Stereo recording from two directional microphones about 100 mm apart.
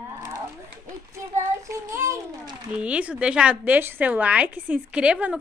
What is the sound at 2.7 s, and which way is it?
A woman's voice, 10° right (ahead or behind).